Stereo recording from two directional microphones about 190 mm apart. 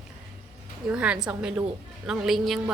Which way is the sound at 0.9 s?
5° right (ahead or behind).